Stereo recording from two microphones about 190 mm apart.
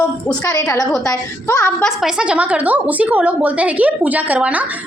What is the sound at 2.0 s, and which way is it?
A woman's voice, 5° right (ahead or behind).